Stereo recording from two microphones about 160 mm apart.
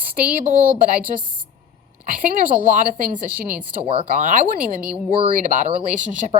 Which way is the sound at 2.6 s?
55° right (ahead or behind).